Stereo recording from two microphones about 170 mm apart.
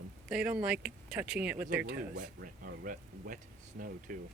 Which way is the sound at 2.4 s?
55° right (ahead or behind).